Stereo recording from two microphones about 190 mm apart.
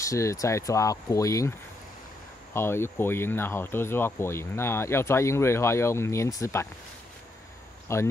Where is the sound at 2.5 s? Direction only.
10° left (ahead or behind).